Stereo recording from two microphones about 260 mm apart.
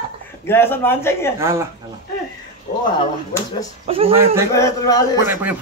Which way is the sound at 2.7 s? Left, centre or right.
Left.